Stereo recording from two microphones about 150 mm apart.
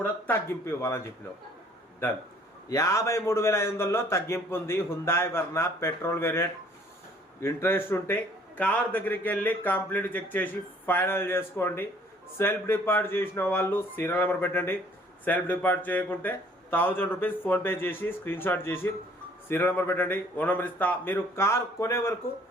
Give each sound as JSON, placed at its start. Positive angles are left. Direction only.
{"t": 0.0, "sound": "a man's voice", "side_deg": 15}
{"t": 2.6, "sound": "a man's voice", "side_deg": 20}